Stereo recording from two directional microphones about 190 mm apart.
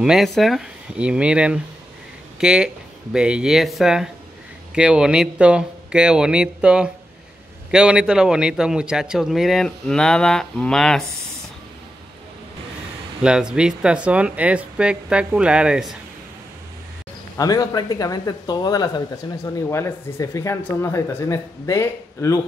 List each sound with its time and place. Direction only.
0.0 s a man's voice: centre (ahead or behind)
13.2 s a man's voice: 5° right (ahead or behind)
17.4 s speech: 20° left (ahead or behind)